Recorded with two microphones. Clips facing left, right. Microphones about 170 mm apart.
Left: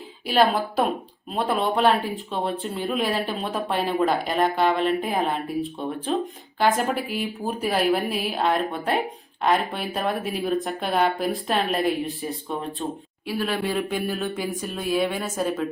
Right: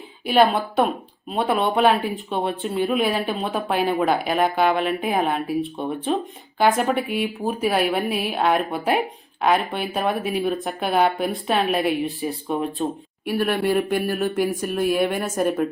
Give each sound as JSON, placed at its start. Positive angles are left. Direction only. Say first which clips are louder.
{"t": 0.3, "sound": "speech", "louder": "right 3 dB", "side_deg": 0}
{"t": 12.5, "sound": "a woman's voice", "louder": "right 6 dB", "side_deg": -20}